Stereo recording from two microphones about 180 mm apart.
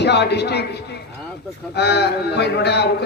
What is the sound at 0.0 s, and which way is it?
A man's voice, 70° left (ahead or behind).